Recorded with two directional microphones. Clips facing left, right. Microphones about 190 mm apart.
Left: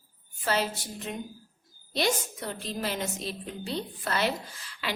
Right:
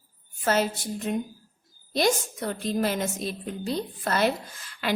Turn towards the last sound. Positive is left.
turn(degrees=-50)  # may be behind; listen again after turning